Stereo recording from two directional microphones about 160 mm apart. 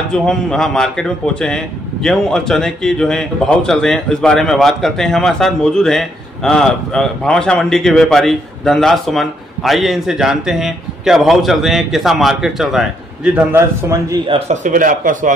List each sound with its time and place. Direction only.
0.1 s a man's voice: 5° left (ahead or behind); by 14.1 s 15° right (ahead or behind)
14.5 s speech: 55° right (ahead or behind)